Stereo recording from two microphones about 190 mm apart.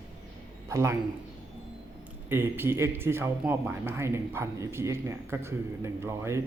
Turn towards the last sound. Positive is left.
turn(degrees=-15)  # may be behind; listen again after turning